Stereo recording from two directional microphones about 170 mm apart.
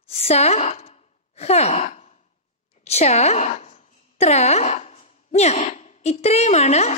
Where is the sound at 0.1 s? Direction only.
35° left (ahead or behind).